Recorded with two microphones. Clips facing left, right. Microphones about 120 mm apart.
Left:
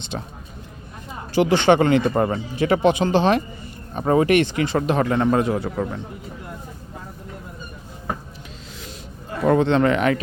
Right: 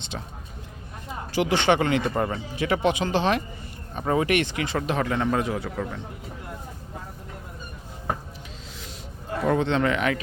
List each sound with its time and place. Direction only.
0.1 s speech: 40° left (ahead or behind)
1.3 s speech: 30° left (ahead or behind)
9.5 s speech: 45° left (ahead or behind)